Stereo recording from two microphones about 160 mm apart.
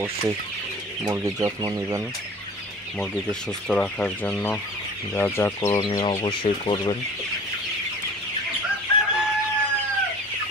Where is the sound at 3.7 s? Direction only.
5° left (ahead or behind).